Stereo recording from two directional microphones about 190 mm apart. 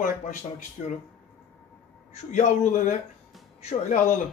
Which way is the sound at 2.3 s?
40° left (ahead or behind).